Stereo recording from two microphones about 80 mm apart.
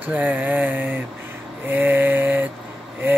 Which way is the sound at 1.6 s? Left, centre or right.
Right.